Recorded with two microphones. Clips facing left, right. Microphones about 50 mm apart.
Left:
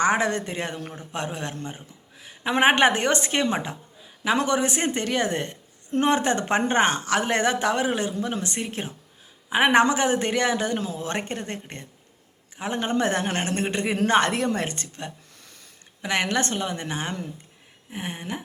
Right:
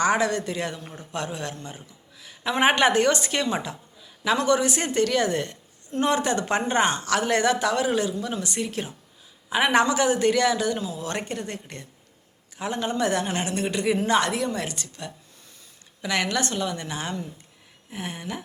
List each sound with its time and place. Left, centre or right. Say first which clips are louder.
0.0 s a man's voice: even; left
10.8 s a woman's voice: left 1 dB; left
11.0 s a man's voice: left 1 dB; left